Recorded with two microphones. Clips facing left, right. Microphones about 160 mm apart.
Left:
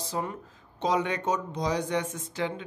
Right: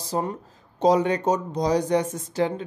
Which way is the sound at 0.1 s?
35° right (ahead or behind).